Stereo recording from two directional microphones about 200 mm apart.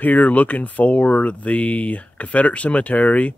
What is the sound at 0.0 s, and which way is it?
Speech, 10° left (ahead or behind).